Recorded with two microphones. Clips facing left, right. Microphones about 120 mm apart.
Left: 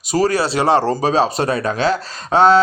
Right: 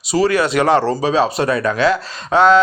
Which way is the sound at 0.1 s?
40° left (ahead or behind).